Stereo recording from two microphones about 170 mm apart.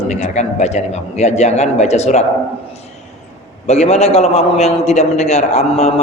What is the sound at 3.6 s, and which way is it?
Speech, 40° left (ahead or behind).